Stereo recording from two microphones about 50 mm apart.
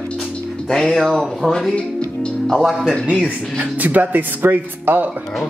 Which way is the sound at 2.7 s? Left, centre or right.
Centre.